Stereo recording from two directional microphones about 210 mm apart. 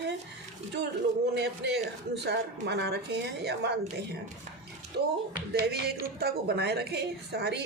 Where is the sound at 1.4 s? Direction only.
55° right (ahead or behind).